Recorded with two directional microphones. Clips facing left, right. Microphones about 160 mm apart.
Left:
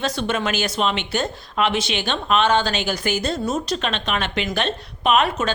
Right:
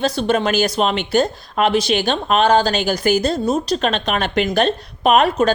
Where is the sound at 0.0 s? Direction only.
35° right (ahead or behind).